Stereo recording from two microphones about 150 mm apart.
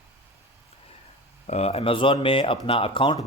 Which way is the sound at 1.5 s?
45° left (ahead or behind).